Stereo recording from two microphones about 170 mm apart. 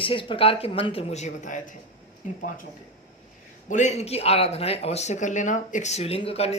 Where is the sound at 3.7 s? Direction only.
45° left (ahead or behind).